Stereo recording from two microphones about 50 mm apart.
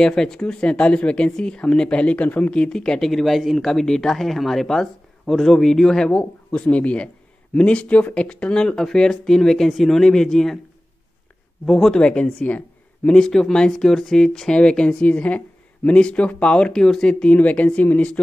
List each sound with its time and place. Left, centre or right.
0.0 s speech: centre; by 2.5 s left
2.5 s speech: centre
11.6 s speech: centre
11.9 s speech: centre
13.0 s speech: centre
16.7 s speech: centre
17.1 s speech: left